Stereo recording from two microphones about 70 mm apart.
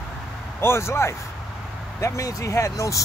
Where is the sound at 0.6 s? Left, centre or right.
Left.